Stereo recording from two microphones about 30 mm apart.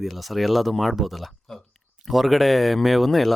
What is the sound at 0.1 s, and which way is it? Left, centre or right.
A man's voice, centre.